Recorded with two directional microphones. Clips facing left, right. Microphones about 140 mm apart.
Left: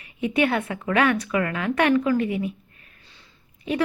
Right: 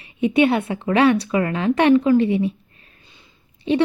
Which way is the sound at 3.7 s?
25° right (ahead or behind).